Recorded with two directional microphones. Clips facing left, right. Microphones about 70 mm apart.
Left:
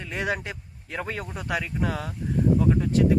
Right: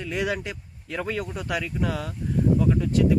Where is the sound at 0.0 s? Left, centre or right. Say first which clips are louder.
Right 2 dB; left.